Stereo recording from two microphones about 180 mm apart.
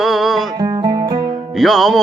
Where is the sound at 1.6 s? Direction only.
Centre (ahead or behind).